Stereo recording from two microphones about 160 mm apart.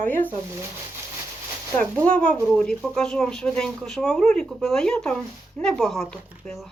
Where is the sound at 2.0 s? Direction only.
5° left (ahead or behind).